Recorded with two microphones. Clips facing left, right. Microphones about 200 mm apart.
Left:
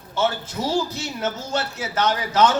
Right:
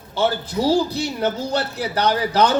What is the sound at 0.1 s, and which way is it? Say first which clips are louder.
Speech: right 3 dB; 35° right (ahead or behind).